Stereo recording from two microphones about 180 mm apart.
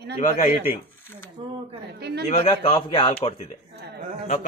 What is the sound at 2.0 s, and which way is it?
Speech, 65° right (ahead or behind).